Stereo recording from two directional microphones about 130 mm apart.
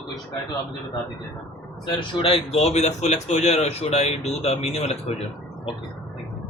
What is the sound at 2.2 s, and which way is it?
Speech, 45° left (ahead or behind).